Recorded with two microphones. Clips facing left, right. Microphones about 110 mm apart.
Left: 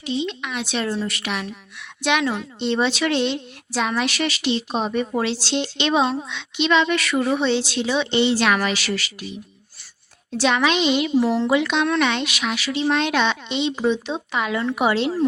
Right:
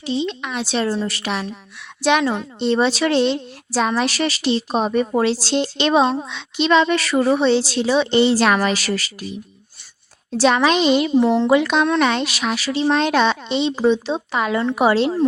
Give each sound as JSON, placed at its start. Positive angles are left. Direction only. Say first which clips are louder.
{"t": 0.0, "sound": "a woman's voice", "louder": "right 3 dB", "side_deg": -35}
{"t": 10.3, "sound": "a woman's voice", "louder": "right 4 dB", "side_deg": -35}
{"t": 11.2, "sound": "speech", "louder": "right 4 dB", "side_deg": -25}
{"t": 11.4, "sound": "a woman's voice", "louder": "right 4 dB", "side_deg": -40}